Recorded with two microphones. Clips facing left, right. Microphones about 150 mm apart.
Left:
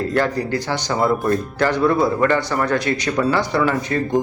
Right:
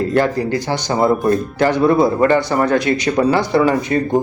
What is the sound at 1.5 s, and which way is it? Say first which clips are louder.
Speech: right 4 dB; 20° right (ahead or behind).